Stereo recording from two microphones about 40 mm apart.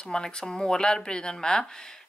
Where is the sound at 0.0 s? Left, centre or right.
Left.